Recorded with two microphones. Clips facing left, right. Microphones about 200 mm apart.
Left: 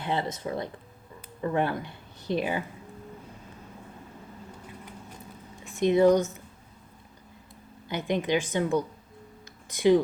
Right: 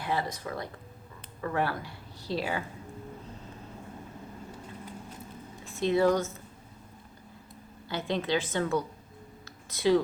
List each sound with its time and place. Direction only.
0.0 s speech: 25° left (ahead or behind)
5.6 s speech: 15° left (ahead or behind)
7.9 s a woman's voice: 15° left (ahead or behind)